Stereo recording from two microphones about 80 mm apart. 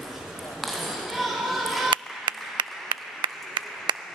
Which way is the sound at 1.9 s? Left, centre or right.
Right.